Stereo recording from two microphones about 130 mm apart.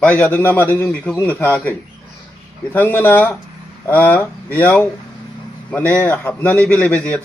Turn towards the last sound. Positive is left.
turn(degrees=10)  # may be behind; listen again after turning